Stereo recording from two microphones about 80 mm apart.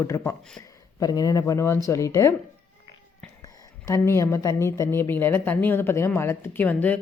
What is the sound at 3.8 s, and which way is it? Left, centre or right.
Speech, left.